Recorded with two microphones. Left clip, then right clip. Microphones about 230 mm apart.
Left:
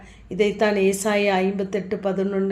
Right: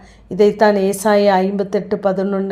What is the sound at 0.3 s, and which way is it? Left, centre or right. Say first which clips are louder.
Speech: right 8 dB; right.